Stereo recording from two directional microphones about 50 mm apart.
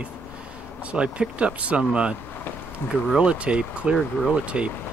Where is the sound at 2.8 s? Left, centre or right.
Left.